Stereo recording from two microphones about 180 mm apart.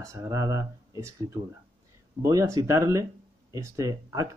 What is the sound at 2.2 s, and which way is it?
Speech, 15° right (ahead or behind).